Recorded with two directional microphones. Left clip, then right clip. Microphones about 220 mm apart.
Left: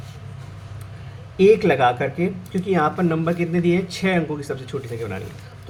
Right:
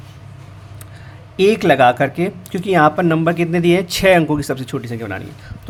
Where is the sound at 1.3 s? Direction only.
50° right (ahead or behind).